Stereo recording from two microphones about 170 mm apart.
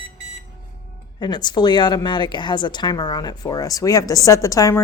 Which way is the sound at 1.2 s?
25° left (ahead or behind).